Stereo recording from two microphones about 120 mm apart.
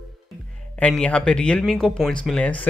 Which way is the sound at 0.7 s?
10° left (ahead or behind).